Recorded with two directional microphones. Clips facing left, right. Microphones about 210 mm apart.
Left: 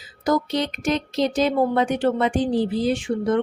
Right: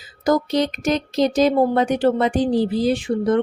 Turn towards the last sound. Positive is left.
turn(degrees=-35)  # may be behind; listen again after turning